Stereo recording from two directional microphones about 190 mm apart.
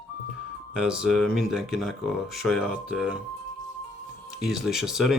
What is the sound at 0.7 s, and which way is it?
Speech, 5° right (ahead or behind).